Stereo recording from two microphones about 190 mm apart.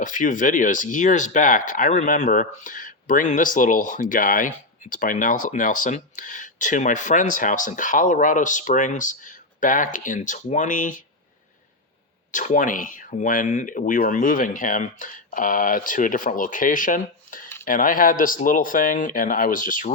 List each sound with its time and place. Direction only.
0.0 s speech: 40° left (ahead or behind)
12.3 s speech: 40° left (ahead or behind)